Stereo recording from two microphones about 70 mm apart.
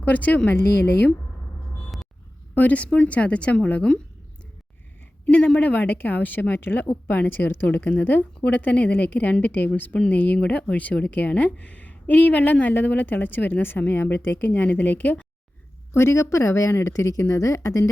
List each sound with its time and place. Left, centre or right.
0.0 s a woman's voice: left
2.6 s a woman's voice: left
5.2 s a woman's voice: centre
15.9 s speech: left